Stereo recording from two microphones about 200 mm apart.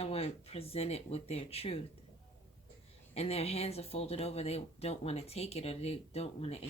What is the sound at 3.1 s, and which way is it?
Speech, 30° left (ahead or behind).